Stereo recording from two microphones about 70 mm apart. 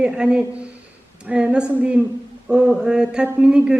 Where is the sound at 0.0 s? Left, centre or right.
Centre.